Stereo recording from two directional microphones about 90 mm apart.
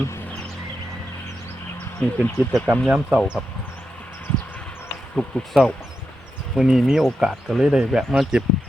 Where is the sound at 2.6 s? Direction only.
15° left (ahead or behind).